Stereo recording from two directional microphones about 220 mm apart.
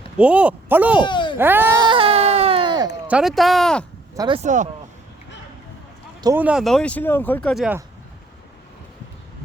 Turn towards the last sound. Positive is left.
turn(degrees=-5)  # may be behind; listen again after turning